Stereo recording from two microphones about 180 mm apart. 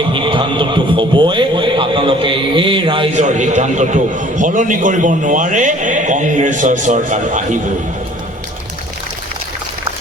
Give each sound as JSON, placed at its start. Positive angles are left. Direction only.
{"t": 0.1, "sound": "speech", "side_deg": -25}
{"t": 3.2, "sound": "a man's voice", "side_deg": -40}